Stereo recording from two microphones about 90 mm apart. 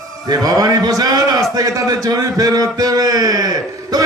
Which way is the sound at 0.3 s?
45° right (ahead or behind).